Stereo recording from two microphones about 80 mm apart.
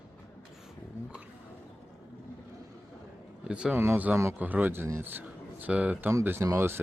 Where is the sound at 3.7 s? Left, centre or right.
Right.